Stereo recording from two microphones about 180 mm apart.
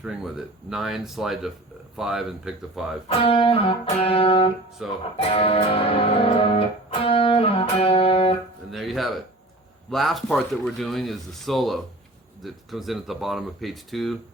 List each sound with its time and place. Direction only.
0.0 s speech: 5° right (ahead or behind)
3.1 s music: 30° left (ahead or behind)
4.8 s speech: centre (ahead or behind)
5.1 s music: 30° left (ahead or behind)
8.7 s speech: centre (ahead or behind)